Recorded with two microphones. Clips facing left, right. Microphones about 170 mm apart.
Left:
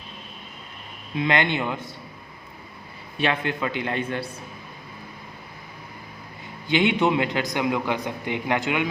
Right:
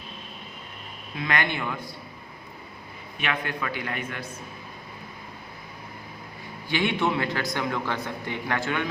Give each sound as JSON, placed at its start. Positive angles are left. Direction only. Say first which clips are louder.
{"t": 1.1, "sound": "a man's voice", "louder": "left 5 dB", "side_deg": 20}
{"t": 3.2, "sound": "a man's voice", "louder": "left 5 dB", "side_deg": 25}
{"t": 6.7, "sound": "a man's voice", "louder": "left 5 dB", "side_deg": 20}